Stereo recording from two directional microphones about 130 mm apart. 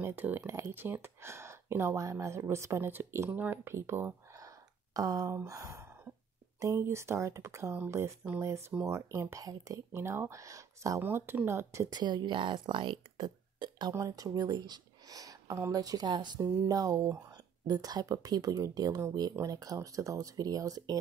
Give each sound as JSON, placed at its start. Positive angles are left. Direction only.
{"t": 0.0, "sound": "speech", "side_deg": -15}
{"t": 12.0, "sound": "speech", "side_deg": -35}